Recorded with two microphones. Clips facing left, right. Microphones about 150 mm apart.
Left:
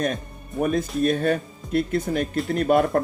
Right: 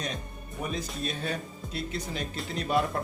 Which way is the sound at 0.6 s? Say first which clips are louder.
Left 12 dB; 55° left (ahead or behind).